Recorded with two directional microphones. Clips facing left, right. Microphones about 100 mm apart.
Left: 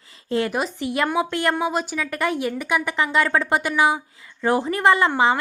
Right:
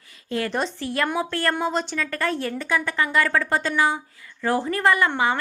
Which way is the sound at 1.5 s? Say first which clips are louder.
Left 1 dB; 5° left (ahead or behind).